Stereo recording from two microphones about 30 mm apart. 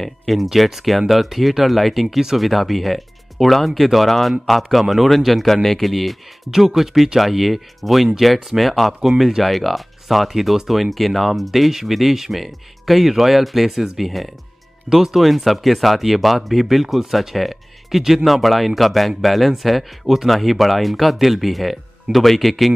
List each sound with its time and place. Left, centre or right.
0.5 s speech: centre
14.9 s speech: centre
15.1 s speech: centre